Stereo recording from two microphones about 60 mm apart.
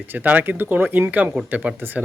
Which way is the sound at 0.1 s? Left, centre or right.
Right.